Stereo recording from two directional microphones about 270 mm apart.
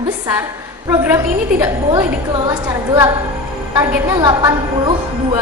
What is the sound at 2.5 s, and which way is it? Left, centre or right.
A woman's voice, centre.